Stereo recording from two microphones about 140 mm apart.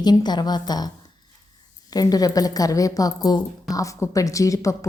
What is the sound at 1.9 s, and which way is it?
A woman's voice, 25° left (ahead or behind).